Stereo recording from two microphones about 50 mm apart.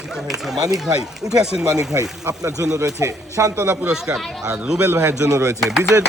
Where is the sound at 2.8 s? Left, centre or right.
Right.